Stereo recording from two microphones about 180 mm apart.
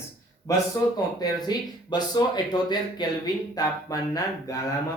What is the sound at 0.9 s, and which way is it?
Speech, 20° left (ahead or behind).